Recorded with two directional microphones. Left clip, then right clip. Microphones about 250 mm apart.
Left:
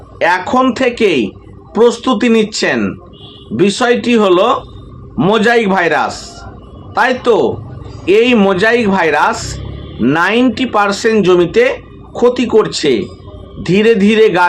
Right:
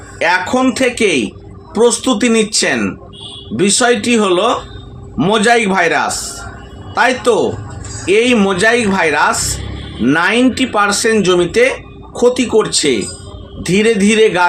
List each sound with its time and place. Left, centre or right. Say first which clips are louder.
0.2 s speech: left 2 dB; centre